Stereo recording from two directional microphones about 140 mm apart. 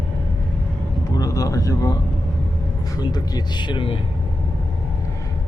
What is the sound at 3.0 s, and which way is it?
Speech, 30° left (ahead or behind).